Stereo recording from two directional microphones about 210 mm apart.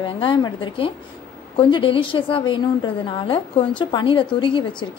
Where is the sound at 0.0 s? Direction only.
25° left (ahead or behind).